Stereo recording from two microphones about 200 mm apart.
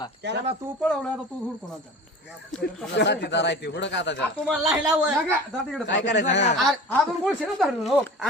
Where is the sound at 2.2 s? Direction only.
Centre (ahead or behind).